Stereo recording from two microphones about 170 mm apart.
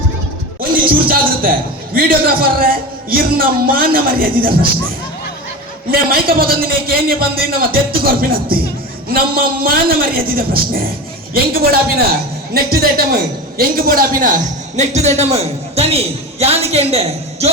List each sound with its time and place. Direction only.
0.9 s a man's voice: 60° right (ahead or behind)
5.9 s a man's voice: 60° right (ahead or behind); by 17.5 s 35° right (ahead or behind)